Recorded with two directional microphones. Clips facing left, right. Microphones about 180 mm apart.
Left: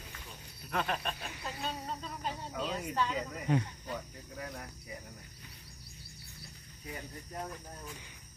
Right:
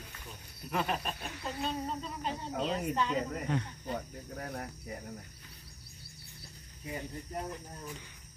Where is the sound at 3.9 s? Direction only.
55° right (ahead or behind).